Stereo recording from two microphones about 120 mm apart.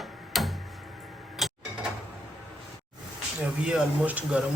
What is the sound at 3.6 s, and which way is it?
Speech, 10° right (ahead or behind).